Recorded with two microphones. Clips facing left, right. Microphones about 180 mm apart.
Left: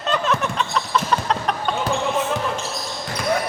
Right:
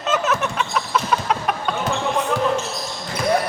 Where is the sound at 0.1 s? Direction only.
5° right (ahead or behind).